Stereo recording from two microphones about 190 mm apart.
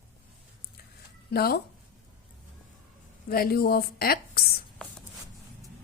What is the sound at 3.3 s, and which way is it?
A woman's voice, 55° left (ahead or behind).